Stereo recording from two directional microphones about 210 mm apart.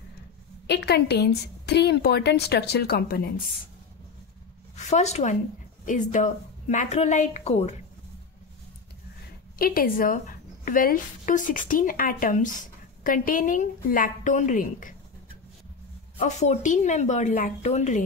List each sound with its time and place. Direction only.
0.7 s a woman's voice: 50° left (ahead or behind)
4.7 s a woman's voice: 35° left (ahead or behind)
9.6 s a woman's voice: 45° left (ahead or behind)
16.2 s a woman's voice: 30° left (ahead or behind)